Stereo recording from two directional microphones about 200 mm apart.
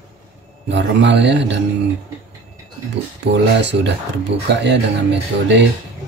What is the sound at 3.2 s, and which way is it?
Speech, 60° right (ahead or behind).